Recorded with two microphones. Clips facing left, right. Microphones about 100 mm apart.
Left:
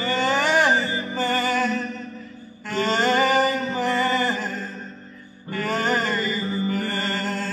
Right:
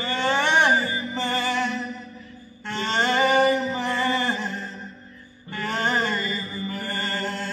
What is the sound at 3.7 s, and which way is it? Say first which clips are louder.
Music: left 2 dB; 25° right (ahead or behind).